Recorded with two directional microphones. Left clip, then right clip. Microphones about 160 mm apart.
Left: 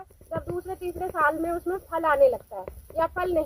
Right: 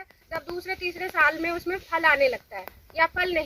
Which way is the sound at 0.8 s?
20° right (ahead or behind).